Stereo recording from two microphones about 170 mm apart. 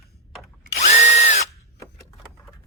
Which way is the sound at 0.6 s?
45° left (ahead or behind).